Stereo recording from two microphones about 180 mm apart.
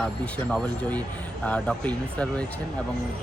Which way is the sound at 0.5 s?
10° left (ahead or behind).